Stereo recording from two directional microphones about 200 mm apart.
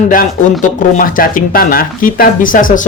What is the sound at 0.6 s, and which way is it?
Speech, 45° left (ahead or behind).